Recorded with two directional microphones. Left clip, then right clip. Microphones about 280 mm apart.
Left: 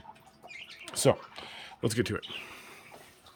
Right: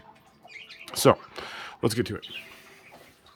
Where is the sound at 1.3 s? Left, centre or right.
Centre.